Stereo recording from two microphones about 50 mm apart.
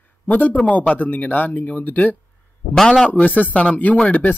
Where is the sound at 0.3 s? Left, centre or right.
Left.